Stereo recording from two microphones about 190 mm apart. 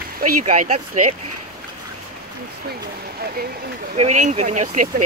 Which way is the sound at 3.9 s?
40° right (ahead or behind).